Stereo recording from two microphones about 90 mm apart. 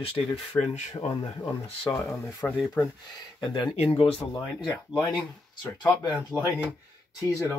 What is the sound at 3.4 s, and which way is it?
Speech, 55° left (ahead or behind).